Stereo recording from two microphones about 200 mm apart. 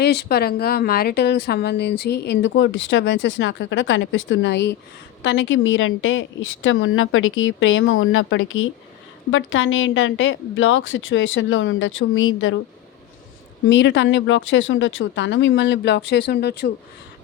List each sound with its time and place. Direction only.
0.0 s a woman's voice: 55° left (ahead or behind); by 12.5 s 75° left (ahead or behind)
13.7 s a woman's voice: 65° left (ahead or behind)